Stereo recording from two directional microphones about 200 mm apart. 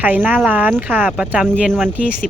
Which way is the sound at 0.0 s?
10° right (ahead or behind).